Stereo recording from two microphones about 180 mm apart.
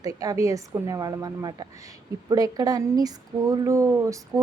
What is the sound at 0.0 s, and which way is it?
A woman's voice, 20° right (ahead or behind).